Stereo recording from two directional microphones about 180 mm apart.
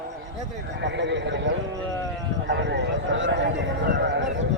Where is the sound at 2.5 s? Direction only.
75° right (ahead or behind).